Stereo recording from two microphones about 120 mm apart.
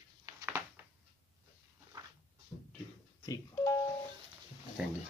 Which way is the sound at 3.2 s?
30° left (ahead or behind).